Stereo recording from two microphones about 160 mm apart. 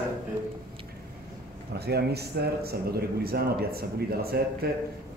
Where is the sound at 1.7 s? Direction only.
90° right.